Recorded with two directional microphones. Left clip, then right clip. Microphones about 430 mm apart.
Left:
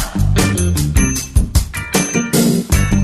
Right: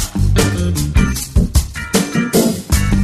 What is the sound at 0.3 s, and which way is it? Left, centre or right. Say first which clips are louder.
Music: even; centre.